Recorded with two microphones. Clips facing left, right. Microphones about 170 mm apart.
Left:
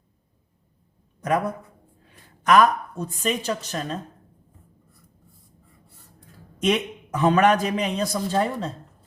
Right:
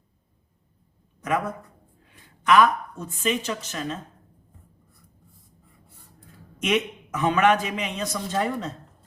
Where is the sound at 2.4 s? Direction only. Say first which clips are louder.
Left 1 dB; 40° left (ahead or behind).